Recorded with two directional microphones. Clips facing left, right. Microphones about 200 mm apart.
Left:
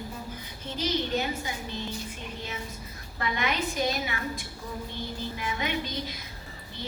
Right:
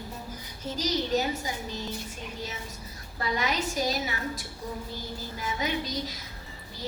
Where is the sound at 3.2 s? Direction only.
40° right (ahead or behind).